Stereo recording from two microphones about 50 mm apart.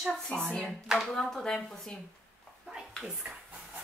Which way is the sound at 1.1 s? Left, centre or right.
Centre.